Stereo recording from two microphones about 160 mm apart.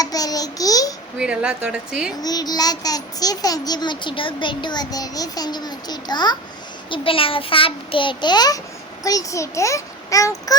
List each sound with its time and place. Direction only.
0.0 s babbling: 25° left (ahead or behind)
1.2 s a woman's voice: 5° right (ahead or behind)
2.2 s a child's voice: 25° left (ahead or behind)